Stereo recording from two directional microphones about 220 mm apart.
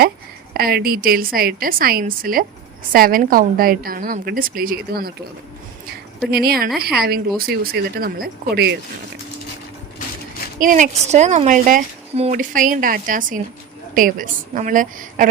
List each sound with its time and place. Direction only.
0.5 s speech: 45° right (ahead or behind)
6.3 s speech: 45° right (ahead or behind)
10.6 s speech: 35° right (ahead or behind)